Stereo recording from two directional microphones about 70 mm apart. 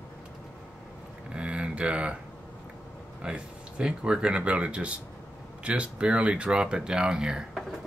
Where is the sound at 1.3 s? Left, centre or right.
Centre.